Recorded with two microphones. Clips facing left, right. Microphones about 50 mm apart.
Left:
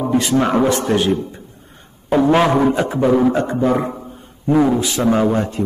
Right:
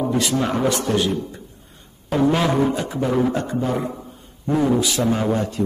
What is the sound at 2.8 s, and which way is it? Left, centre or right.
A man's voice, left.